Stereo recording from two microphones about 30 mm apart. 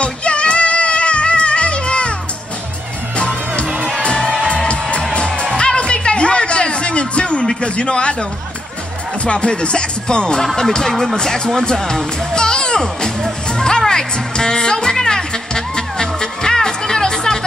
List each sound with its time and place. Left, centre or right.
0.0 s music: left
3.2 s music: left
4.2 s music: left
5.1 s music: left
7.6 s speech: left
9.2 s speech: left
11.2 s music: centre